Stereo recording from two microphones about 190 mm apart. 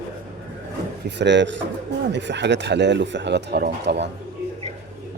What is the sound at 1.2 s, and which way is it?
Speech, 70° right (ahead or behind).